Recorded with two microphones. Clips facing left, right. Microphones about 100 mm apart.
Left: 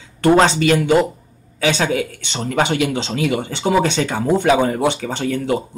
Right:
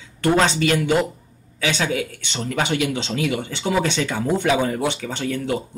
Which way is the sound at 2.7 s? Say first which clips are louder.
Left 3 dB; 55° left (ahead or behind).